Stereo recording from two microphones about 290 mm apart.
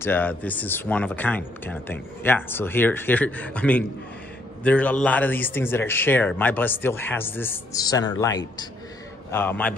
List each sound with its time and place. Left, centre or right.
0.0 s speech: centre